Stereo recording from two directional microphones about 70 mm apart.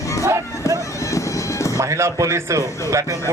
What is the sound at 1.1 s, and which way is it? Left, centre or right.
Music, left.